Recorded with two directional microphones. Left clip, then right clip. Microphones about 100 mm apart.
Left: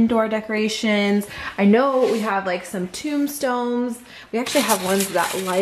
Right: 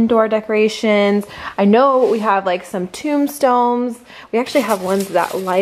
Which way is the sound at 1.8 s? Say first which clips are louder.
Right 6 dB; 20° left (ahead or behind).